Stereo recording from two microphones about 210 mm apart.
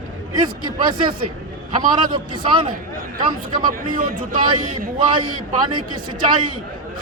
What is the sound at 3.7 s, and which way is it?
Speech, 40° right (ahead or behind).